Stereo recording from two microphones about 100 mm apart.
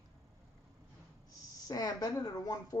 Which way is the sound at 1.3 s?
35° left (ahead or behind).